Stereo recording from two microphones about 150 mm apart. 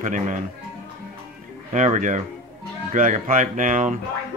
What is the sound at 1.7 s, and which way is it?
A man's voice, 55° right (ahead or behind).